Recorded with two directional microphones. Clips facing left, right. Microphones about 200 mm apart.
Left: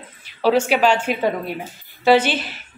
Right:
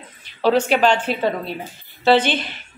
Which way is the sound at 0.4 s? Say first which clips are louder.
Even; 10° left (ahead or behind).